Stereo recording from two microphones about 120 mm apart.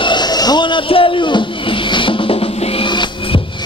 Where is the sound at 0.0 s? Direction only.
40° left (ahead or behind).